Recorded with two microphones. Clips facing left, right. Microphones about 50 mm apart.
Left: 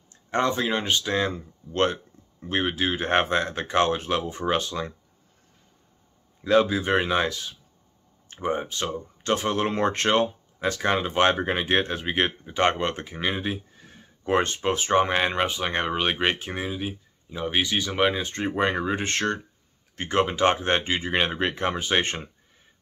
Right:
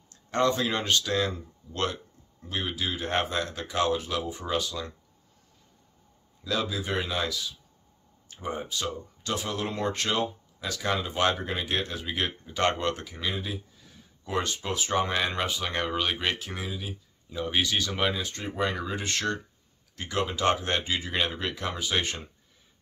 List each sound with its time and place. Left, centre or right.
0.1 s speech: left
6.4 s speech: left